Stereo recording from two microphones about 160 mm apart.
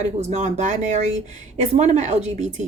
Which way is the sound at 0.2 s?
45° right (ahead or behind).